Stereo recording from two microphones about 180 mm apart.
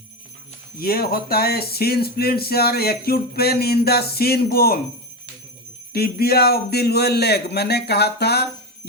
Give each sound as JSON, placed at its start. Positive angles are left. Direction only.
{"t": 0.8, "sound": "speech", "side_deg": 60}
{"t": 5.9, "sound": "speech", "side_deg": 60}